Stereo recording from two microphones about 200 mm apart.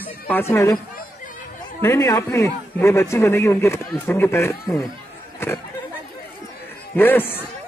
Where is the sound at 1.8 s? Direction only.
15° left (ahead or behind).